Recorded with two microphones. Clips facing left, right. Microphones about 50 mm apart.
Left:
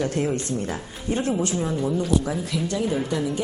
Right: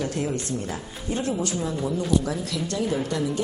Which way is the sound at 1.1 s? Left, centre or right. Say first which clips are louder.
Left 3 dB; left.